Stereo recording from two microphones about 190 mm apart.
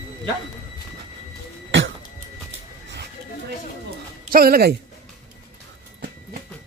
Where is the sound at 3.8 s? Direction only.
55° right (ahead or behind).